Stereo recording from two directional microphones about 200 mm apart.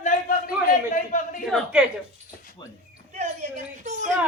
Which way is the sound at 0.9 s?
40° left (ahead or behind).